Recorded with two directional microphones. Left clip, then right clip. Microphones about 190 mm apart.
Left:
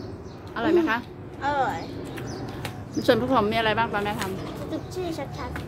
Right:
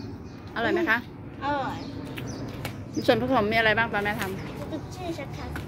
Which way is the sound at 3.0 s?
10° left (ahead or behind).